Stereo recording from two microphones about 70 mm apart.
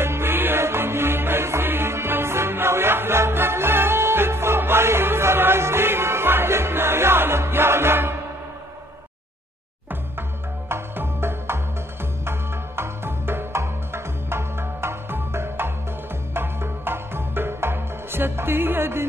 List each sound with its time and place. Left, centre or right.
0.0 s music: right
10.7 s music: right